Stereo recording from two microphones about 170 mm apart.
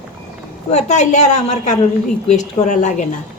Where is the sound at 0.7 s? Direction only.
45° left (ahead or behind).